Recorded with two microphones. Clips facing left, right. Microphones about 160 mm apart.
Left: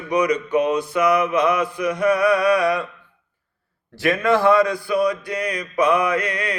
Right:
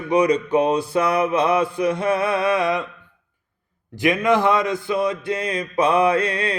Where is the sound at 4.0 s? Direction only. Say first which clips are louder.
Even; 20° right (ahead or behind).